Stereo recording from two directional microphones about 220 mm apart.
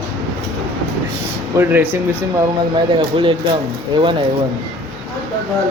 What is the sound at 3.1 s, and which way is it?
Speech, 25° right (ahead or behind).